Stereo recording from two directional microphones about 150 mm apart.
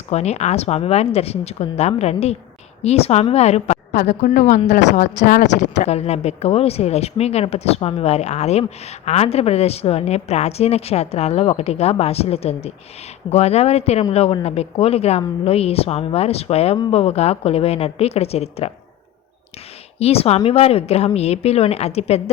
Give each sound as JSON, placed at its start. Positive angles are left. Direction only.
{"t": 0.1, "sound": "a woman's voice", "side_deg": 45}
{"t": 20.0, "sound": "a woman's voice", "side_deg": 40}